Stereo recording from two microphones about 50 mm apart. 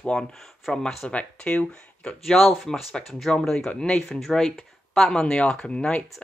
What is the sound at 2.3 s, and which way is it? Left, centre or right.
Speech, centre.